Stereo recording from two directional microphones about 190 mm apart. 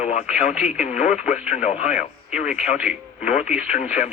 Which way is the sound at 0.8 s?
40° left (ahead or behind).